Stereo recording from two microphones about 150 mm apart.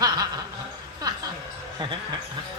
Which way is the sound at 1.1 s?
25° right (ahead or behind).